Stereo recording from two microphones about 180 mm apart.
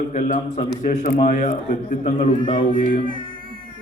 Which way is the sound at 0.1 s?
45° left (ahead or behind).